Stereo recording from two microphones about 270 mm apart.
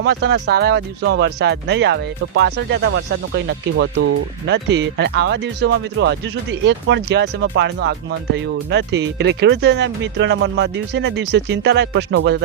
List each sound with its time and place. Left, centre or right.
0.0 s speech: right